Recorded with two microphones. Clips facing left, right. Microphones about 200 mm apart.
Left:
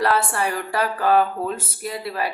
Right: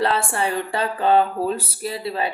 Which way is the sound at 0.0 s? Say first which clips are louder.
Even; 25° right (ahead or behind).